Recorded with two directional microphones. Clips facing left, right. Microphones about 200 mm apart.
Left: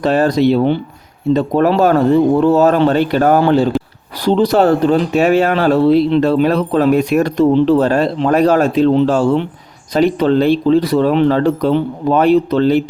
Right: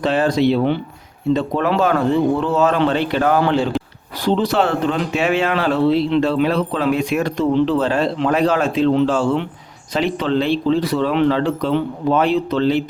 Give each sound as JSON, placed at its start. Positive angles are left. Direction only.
{"t": 0.0, "sound": "speech", "side_deg": 40}